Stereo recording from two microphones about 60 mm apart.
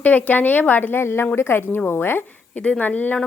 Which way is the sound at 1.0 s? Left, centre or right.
Left.